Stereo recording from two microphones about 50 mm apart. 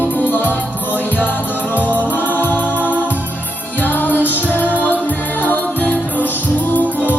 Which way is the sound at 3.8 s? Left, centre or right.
Left.